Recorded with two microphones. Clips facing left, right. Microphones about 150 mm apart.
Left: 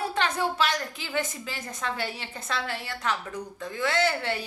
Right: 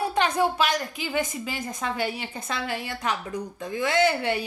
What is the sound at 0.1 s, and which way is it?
A woman's voice, 15° right (ahead or behind).